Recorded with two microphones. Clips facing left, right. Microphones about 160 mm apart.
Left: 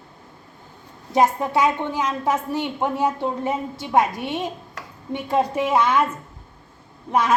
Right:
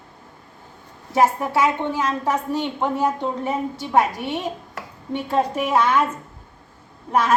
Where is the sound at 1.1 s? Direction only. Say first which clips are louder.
Even; 15° left (ahead or behind).